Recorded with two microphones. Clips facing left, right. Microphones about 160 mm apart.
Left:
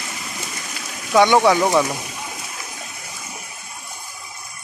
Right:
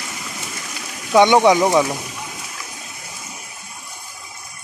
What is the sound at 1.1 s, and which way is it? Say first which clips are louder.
Speech: right 2 dB; 20° right (ahead or behind).